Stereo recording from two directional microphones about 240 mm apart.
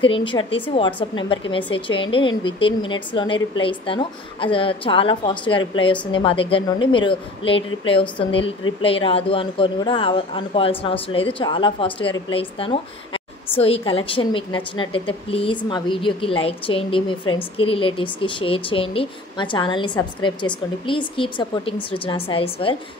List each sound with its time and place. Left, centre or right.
0.0 s speech: left